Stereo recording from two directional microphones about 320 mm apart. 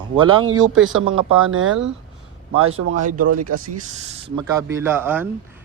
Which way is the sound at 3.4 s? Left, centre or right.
Right.